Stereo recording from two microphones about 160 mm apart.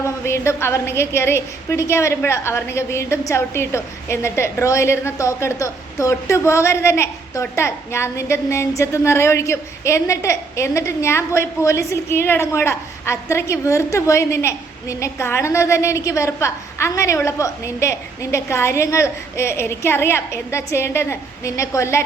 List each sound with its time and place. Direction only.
0.0 s a woman's voice: 15° left (ahead or behind)